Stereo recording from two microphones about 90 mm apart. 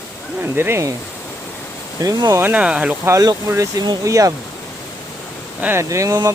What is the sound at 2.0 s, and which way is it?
Speech, 40° right (ahead or behind).